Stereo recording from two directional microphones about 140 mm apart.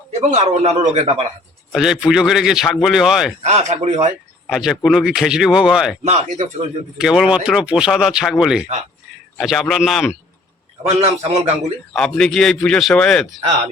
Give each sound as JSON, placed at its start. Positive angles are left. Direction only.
{"t": 0.1, "sound": "a man's voice", "side_deg": -55}
{"t": 1.7, "sound": "speech", "side_deg": -5}
{"t": 3.4, "sound": "speech", "side_deg": -55}
{"t": 4.4, "sound": "speech", "side_deg": 0}
{"t": 6.1, "sound": "a man's voice", "side_deg": -55}
{"t": 7.0, "sound": "speech", "side_deg": -5}
{"t": 10.8, "sound": "a man's voice", "side_deg": -50}
{"t": 11.9, "sound": "speech", "side_deg": 5}